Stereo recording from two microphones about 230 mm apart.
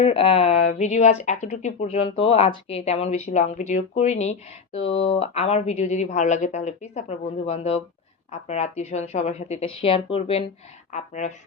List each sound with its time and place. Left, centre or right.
0.0 s speech: left